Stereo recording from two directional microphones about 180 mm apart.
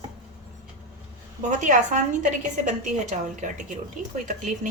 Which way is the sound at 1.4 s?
45° right (ahead or behind).